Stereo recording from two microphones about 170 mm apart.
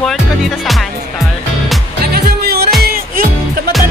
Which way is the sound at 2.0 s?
65° right (ahead or behind).